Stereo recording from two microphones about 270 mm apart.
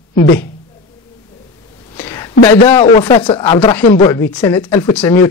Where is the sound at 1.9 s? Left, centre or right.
Centre.